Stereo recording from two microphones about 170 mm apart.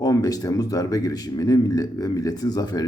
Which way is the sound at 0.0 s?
20° left (ahead or behind).